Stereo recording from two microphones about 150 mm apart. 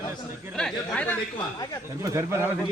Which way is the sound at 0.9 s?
10° left (ahead or behind).